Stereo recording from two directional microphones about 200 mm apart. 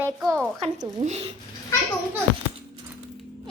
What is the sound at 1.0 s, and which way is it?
Speech, 35° right (ahead or behind).